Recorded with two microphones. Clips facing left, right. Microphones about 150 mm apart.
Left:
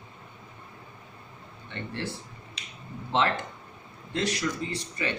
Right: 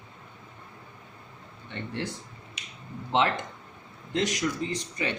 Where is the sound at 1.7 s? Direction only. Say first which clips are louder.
Right 1 dB; 15° right (ahead or behind).